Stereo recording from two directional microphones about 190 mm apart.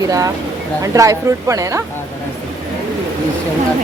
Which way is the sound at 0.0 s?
20° right (ahead or behind).